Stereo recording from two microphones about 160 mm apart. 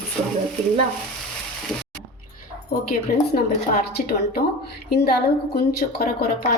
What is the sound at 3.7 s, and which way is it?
Speech, 70° left (ahead or behind).